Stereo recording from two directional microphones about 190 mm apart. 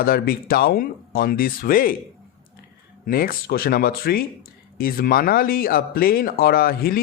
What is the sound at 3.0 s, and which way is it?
Speech, 50° left (ahead or behind).